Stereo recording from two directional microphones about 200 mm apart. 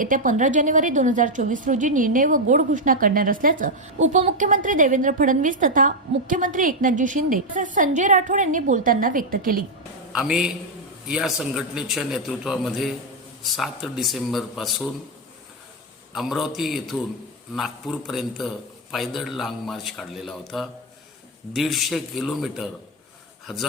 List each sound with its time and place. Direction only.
0.0 s a woman's voice: 40° right (ahead or behind)
10.1 s a man's voice: 5° right (ahead or behind)
16.1 s a man's voice: centre (ahead or behind)